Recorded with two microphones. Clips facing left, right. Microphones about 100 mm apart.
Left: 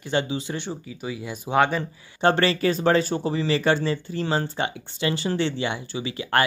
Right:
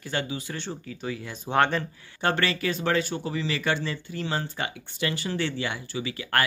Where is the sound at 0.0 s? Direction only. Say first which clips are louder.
Left 6 dB; 25° left (ahead or behind).